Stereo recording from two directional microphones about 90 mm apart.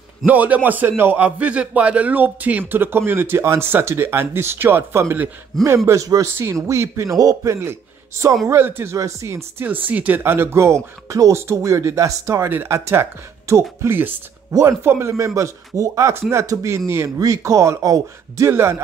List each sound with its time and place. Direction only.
0.3 s speech: 20° right (ahead or behind)
5.5 s speech: centre (ahead or behind)
5.9 s speech: 40° right (ahead or behind)
9.7 s speech: 20° right (ahead or behind)
14.5 s speech: 35° right (ahead or behind)